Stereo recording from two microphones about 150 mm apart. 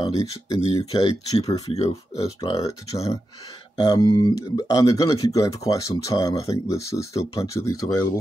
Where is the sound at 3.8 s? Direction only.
30° left (ahead or behind).